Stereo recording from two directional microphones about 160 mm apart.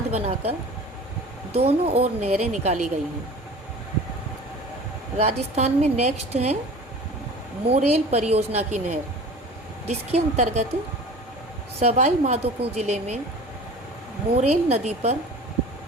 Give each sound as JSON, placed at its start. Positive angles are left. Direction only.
{"t": 0.1, "sound": "a woman's voice", "side_deg": -40}
{"t": 1.5, "sound": "a woman's voice", "side_deg": -40}
{"t": 5.2, "sound": "a woman's voice", "side_deg": -40}
{"t": 7.7, "sound": "a woman's voice", "side_deg": -40}
{"t": 11.8, "sound": "a woman's voice", "side_deg": -45}
{"t": 14.3, "sound": "a woman's voice", "side_deg": -45}